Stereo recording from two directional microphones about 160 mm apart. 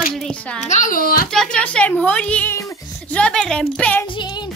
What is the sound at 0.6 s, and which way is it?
Speech, 50° left (ahead or behind).